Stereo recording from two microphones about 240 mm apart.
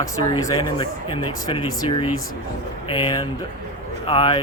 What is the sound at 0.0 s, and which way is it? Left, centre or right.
Speech, centre.